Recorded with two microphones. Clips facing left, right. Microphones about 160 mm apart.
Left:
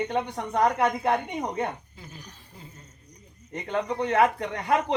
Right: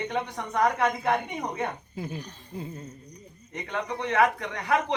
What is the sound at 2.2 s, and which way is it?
Speech, 10° left (ahead or behind).